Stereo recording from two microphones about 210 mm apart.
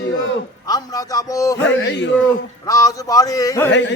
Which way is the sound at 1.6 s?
60° left (ahead or behind).